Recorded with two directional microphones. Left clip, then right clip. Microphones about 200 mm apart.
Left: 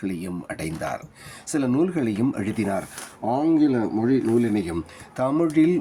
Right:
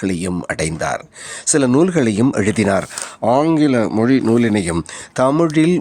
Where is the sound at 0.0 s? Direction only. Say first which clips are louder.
Right 10 dB; 50° right (ahead or behind).